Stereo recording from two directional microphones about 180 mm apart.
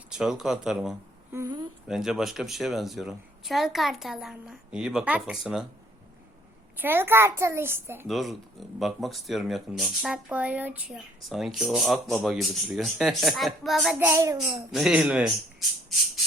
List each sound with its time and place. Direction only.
0.1 s speech: 5° right (ahead or behind)
1.3 s a woman's voice: 20° right (ahead or behind)
1.9 s speech: centre (ahead or behind)
6.7 s a child's voice: 10° right (ahead or behind)
8.0 s speech: centre (ahead or behind)
14.1 s a child's voice: 15° right (ahead or behind)
14.7 s speech: centre (ahead or behind)